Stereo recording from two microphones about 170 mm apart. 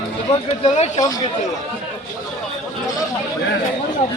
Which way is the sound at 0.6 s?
40° left (ahead or behind).